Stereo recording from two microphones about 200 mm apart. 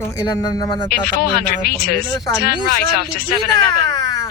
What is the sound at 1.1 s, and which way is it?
Speech, 50° left (ahead or behind).